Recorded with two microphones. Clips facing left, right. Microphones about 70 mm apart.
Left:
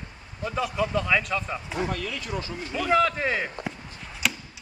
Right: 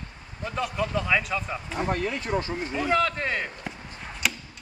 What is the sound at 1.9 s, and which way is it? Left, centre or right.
Speech, right.